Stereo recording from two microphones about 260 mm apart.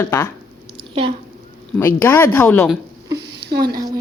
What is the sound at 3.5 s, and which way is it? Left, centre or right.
Speech, right.